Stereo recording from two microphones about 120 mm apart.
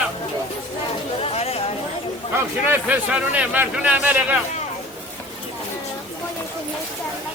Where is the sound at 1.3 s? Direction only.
60° left (ahead or behind).